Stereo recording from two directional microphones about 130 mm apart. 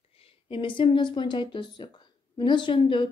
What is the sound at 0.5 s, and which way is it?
A woman's voice, 40° left (ahead or behind).